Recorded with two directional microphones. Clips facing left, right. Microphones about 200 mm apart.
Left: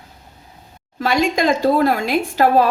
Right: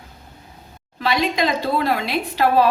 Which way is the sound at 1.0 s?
45° left (ahead or behind).